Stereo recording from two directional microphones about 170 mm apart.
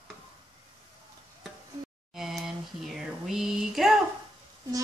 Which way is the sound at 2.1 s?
Centre (ahead or behind).